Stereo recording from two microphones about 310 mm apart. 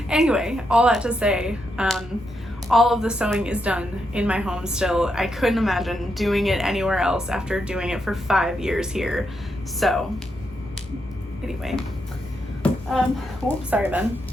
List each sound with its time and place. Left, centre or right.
0.1 s a woman's voice: centre
11.4 s a woman's voice: centre
12.6 s a sound: centre
13.7 s a woman's voice: centre